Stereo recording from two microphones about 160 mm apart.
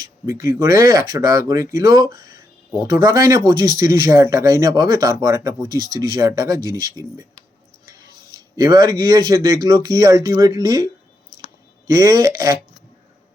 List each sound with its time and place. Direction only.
0.3 s speech: 20° right (ahead or behind)